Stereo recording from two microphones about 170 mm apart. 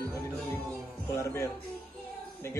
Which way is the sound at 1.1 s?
15° left (ahead or behind).